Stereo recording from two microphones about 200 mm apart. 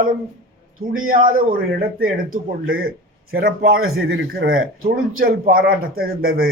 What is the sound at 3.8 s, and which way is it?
Speech, 90° right.